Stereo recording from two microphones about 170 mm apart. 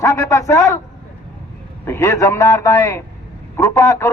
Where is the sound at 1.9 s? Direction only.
15° left (ahead or behind).